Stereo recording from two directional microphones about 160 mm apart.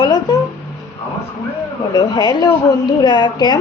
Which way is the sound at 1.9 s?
25° left (ahead or behind).